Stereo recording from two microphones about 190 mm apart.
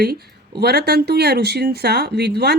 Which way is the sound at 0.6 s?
55° right (ahead or behind).